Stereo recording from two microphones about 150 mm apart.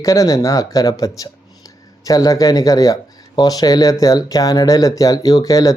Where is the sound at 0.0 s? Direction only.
25° left (ahead or behind).